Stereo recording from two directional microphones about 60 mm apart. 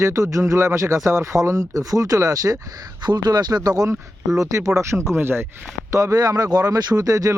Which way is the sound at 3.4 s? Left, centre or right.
Right.